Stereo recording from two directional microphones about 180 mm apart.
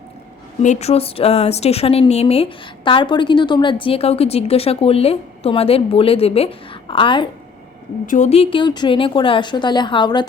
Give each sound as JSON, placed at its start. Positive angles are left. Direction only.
{"t": 0.6, "sound": "a woman's voice", "side_deg": 40}
{"t": 8.0, "sound": "speech", "side_deg": 45}